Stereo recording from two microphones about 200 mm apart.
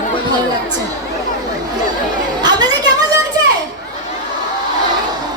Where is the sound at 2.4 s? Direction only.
20° right (ahead or behind).